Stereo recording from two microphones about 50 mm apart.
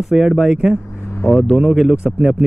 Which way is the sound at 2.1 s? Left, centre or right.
Centre.